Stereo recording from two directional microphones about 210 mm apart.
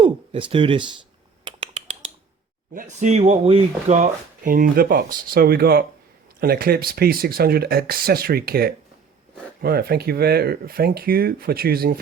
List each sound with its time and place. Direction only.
0.0 s speech: 25° right (ahead or behind)
1.5 s finger snapping: 25° right (ahead or behind)
2.7 s speech: 35° right (ahead or behind)